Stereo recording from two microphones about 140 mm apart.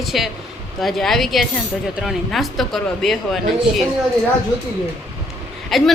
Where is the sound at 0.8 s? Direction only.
Centre (ahead or behind).